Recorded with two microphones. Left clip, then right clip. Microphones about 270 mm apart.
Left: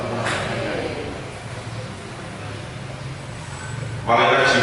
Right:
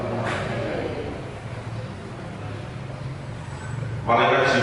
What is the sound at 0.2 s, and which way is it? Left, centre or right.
Vehicle, centre.